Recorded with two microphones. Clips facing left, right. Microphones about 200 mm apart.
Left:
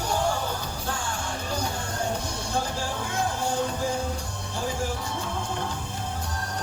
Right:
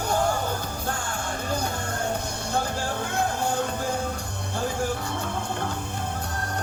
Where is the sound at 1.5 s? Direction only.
60° right (ahead or behind).